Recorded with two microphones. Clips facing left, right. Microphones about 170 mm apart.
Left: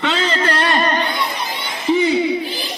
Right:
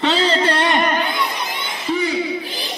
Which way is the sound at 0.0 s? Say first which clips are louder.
Right 2 dB; 35° right (ahead or behind).